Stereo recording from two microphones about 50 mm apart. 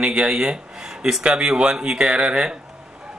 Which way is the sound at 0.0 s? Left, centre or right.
Centre.